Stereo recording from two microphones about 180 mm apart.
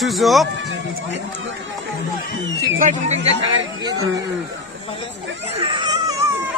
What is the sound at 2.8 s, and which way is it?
Speech, 40° right (ahead or behind).